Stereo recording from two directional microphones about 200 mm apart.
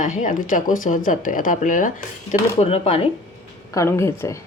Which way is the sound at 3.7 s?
15° left (ahead or behind).